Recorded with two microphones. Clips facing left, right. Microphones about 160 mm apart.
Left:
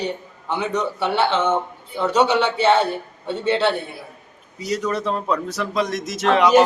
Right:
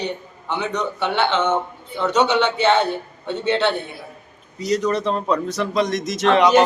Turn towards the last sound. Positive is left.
turn(degrees=5)  # may be behind; listen again after turning